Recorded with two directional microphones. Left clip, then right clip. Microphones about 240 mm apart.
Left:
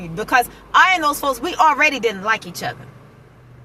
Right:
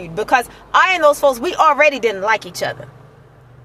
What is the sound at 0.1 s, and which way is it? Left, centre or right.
A woman's voice, centre.